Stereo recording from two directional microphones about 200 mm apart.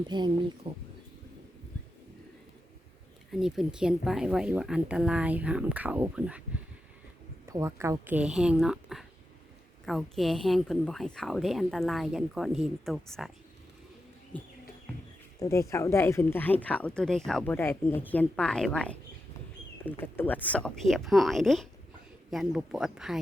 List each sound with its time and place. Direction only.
0.1 s speech: 20° right (ahead or behind)
3.3 s speech: centre (ahead or behind)
7.4 s speech: 15° right (ahead or behind); by 13.3 s centre (ahead or behind)
14.3 s speech: 10° left (ahead or behind)